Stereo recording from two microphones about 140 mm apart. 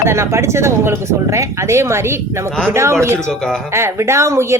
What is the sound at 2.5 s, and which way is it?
Speech, 5° left (ahead or behind).